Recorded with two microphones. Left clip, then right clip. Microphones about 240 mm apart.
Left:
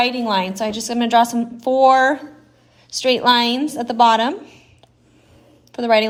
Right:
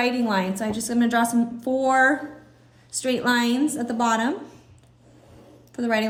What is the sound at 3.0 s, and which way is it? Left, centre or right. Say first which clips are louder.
Speech: left 8 dB; left.